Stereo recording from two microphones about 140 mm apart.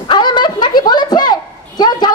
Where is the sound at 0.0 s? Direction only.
35° left (ahead or behind).